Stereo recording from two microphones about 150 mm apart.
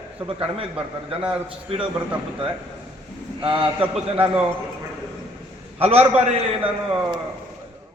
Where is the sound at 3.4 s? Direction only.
35° right (ahead or behind).